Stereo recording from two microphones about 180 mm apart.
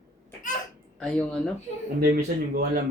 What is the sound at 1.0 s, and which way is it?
Speech, 5° left (ahead or behind).